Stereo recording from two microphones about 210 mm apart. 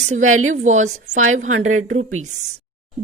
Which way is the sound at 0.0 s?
35° right (ahead or behind).